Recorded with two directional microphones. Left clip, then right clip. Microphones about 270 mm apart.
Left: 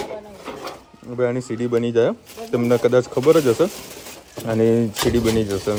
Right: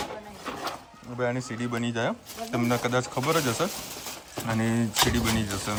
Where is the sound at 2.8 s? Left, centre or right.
Left.